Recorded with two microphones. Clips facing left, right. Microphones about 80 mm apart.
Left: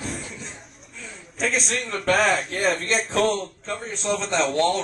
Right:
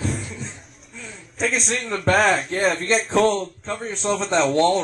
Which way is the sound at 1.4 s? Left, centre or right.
Centre.